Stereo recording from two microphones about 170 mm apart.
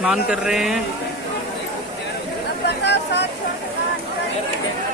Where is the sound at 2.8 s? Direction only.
85° left.